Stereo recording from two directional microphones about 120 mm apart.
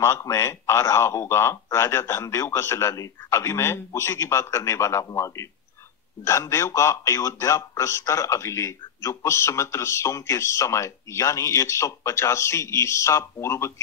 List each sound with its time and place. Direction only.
0.0 s a man's voice: 25° left (ahead or behind)